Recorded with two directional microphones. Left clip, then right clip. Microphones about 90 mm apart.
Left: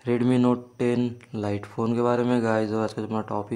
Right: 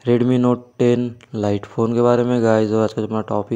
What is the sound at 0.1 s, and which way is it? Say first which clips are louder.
Speech: right 3 dB; 55° right (ahead or behind).